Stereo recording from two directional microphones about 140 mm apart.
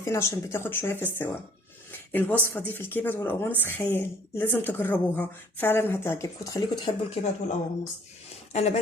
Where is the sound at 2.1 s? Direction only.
15° left (ahead or behind).